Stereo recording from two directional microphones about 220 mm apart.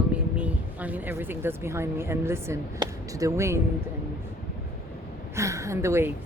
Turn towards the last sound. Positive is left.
turn(degrees=-10)  # may be behind; listen again after turning